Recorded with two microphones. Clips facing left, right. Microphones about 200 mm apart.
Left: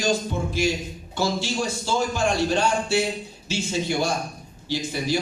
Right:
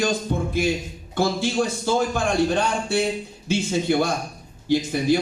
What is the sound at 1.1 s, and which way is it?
A man's voice, 55° right (ahead or behind).